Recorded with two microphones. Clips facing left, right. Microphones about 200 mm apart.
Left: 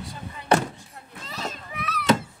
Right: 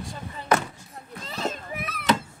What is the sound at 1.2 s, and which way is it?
Children playing, 30° right (ahead or behind).